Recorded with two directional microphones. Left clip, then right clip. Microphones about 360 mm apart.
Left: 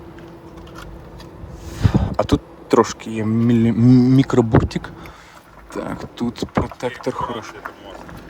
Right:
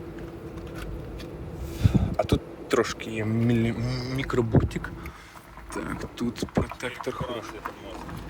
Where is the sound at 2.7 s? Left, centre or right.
Centre.